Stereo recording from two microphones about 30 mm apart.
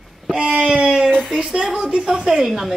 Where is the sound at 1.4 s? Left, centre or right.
Centre.